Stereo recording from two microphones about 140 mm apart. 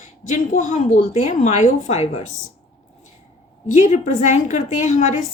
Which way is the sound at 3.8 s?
65° left (ahead or behind).